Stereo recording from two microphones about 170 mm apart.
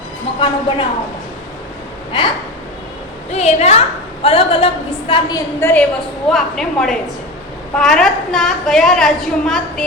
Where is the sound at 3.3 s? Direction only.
40° left (ahead or behind).